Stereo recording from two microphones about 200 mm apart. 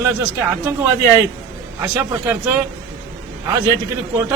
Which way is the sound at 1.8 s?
10° right (ahead or behind).